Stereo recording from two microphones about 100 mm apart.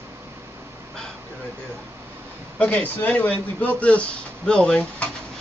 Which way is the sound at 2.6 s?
15° left (ahead or behind).